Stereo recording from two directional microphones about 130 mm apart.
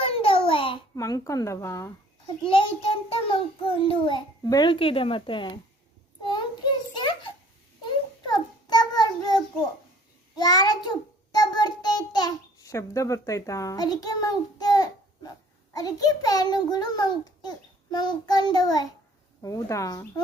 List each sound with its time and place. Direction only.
0.0 s a sound: 45° left (ahead or behind)
0.9 s a woman's voice: 25° left (ahead or behind)
2.4 s a child's voice: 40° left (ahead or behind)
4.4 s a woman's voice: 30° left (ahead or behind)
4.7 s a child's voice: 45° left (ahead or behind)
8.2 s child singing: 30° left (ahead or behind)
15.7 s a child's voice: 30° left (ahead or behind)